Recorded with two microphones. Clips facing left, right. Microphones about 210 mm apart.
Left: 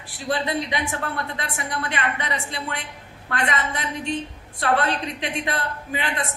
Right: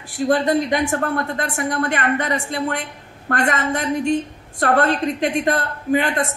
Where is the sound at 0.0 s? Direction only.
45° right (ahead or behind).